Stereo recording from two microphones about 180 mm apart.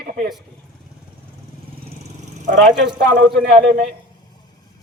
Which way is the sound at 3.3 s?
Centre (ahead or behind).